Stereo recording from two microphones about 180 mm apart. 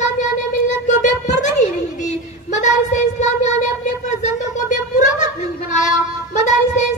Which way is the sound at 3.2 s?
40° left (ahead or behind).